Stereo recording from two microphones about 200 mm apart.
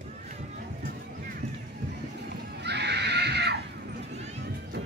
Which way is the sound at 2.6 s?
55° right (ahead or behind).